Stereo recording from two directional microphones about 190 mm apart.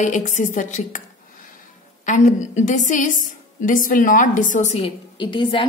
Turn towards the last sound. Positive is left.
turn(degrees=25)  # may be behind; listen again after turning